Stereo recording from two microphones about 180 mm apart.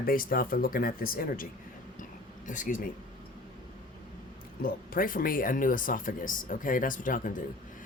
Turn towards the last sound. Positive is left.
turn(degrees=50)  # may be behind; listen again after turning